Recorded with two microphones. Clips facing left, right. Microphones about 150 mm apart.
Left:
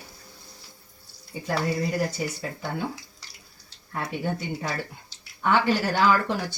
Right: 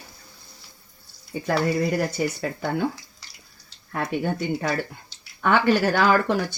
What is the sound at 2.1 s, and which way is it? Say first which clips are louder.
Speech: right 5 dB; 60° right (ahead or behind).